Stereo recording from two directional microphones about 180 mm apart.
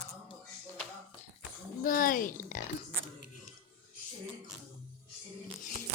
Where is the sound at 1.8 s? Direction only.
50° left (ahead or behind).